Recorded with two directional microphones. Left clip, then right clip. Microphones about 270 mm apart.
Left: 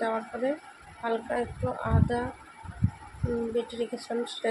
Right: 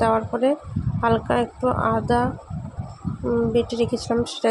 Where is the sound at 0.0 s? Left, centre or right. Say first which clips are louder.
Right 10 dB; right.